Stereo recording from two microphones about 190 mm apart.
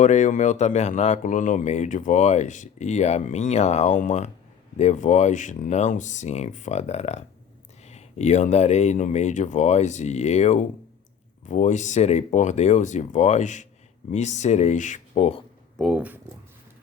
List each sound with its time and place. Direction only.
0.0 s speech: 40° left (ahead or behind)
15.8 s speech: 5° right (ahead or behind)